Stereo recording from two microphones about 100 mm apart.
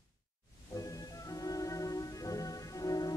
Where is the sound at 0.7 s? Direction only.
35° left (ahead or behind).